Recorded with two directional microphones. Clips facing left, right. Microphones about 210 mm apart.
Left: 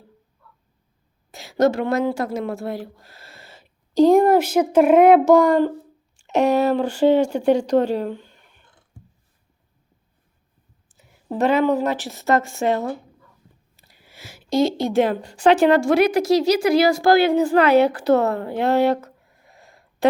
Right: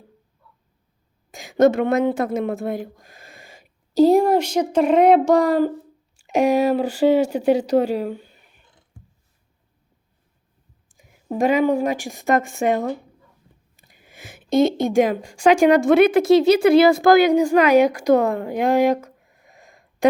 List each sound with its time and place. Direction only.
1.3 s a woman's voice: 15° right (ahead or behind)
10.8 s a woman's voice: 15° right (ahead or behind)
13.7 s a sound: 15° right (ahead or behind)
14.6 s a woman's voice: 20° right (ahead or behind)